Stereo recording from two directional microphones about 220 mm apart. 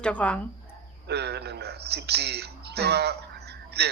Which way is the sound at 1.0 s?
50° right (ahead or behind).